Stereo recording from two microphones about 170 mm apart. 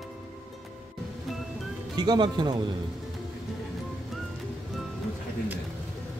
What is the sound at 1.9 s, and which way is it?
Speech, 25° right (ahead or behind).